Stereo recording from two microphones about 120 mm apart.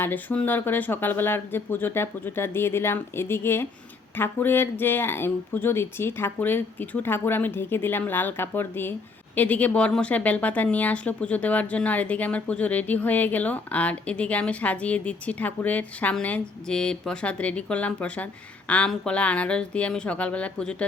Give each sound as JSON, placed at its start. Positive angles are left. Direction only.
{"t": 0.0, "sound": "a woman's voice", "side_deg": 15}